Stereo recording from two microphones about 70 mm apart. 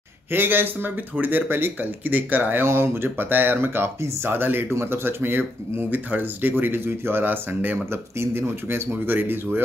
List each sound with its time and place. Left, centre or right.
0.3 s speech: right